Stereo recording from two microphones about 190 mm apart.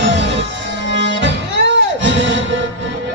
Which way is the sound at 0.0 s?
70° right (ahead or behind).